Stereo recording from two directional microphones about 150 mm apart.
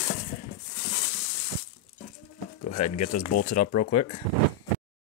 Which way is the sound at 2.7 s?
55° left (ahead or behind).